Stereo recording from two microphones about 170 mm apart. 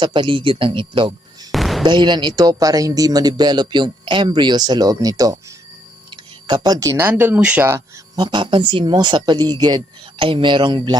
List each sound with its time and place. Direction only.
0.0 s speech: 25° right (ahead or behind)
1.5 s a sound: centre (ahead or behind)
1.8 s speech: 25° right (ahead or behind)
8.2 s speech: 25° right (ahead or behind)